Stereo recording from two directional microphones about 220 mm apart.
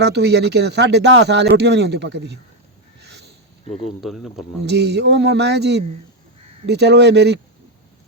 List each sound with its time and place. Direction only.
0.0 s speech: 50° right (ahead or behind)
3.0 s a sound: 50° right (ahead or behind)
3.8 s speech: centre (ahead or behind)
4.6 s speech: 50° right (ahead or behind)